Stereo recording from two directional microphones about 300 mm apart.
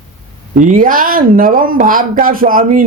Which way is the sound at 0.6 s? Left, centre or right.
Right.